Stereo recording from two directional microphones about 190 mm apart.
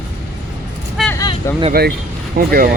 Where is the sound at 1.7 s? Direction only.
55° right (ahead or behind).